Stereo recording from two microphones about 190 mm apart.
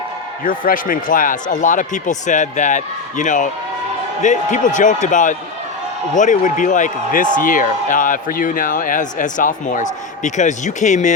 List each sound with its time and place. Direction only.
0.4 s speech: 45° left (ahead or behind)